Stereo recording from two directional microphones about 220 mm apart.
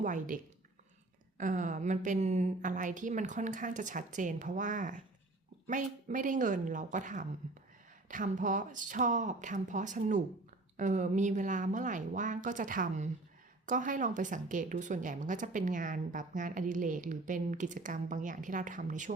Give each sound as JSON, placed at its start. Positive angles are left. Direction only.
{"t": 0.0, "sound": "a woman's voice", "side_deg": -35}
{"t": 1.4, "sound": "a woman's voice", "side_deg": -35}